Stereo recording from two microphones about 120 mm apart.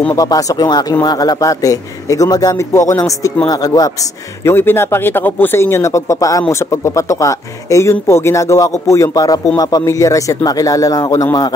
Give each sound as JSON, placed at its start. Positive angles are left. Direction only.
{"t": 0.1, "sound": "speech", "side_deg": 30}
{"t": 4.5, "sound": "speech", "side_deg": 20}